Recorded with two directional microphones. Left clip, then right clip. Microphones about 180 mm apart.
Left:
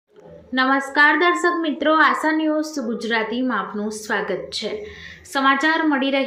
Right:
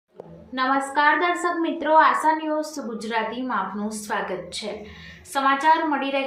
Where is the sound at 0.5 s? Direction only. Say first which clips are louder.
Left 4 dB; 20° left (ahead or behind).